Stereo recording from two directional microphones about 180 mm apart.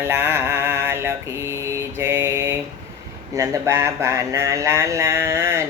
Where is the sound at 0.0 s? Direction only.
15° right (ahead or behind).